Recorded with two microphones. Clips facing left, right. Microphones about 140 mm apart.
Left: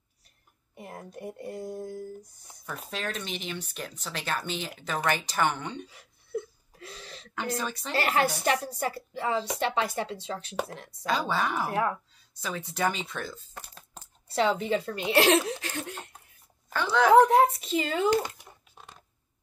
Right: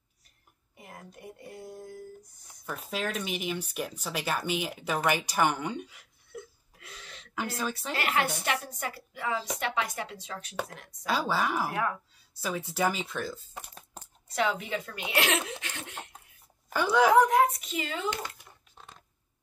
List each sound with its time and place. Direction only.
0.7 s speech: 40° left (ahead or behind)
2.6 s speech: 5° right (ahead or behind)
5.9 s a sound: 35° left (ahead or behind)
7.3 s speech: 5° right (ahead or behind)
7.9 s a woman's voice: 35° left (ahead or behind)
11.1 s speech: 5° right (ahead or behind)
13.5 s a sound: 15° right (ahead or behind)
14.2 s a woman's voice: 30° left (ahead or behind)
15.6 s laughter: 40° left (ahead or behind)
16.6 s speech: 10° right (ahead or behind)
17.1 s a woman's voice: 30° left (ahead or behind)
18.2 s a sound: 15° left (ahead or behind)